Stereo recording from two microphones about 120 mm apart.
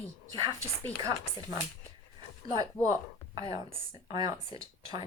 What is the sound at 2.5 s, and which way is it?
A woman's voice, 35° right (ahead or behind).